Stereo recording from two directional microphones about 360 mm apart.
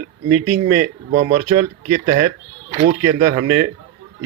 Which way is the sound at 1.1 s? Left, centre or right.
Centre.